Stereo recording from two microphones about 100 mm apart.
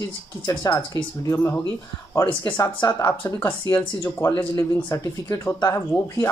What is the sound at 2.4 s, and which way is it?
Speech, 45° left (ahead or behind).